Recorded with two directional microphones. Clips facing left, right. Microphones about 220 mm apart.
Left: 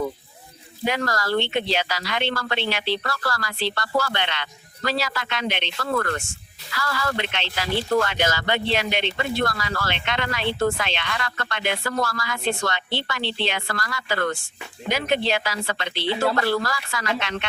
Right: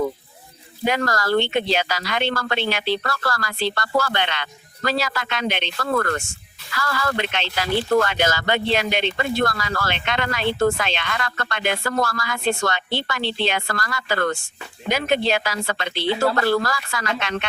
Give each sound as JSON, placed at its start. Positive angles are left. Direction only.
{"t": 0.9, "sound": "speech", "side_deg": -50}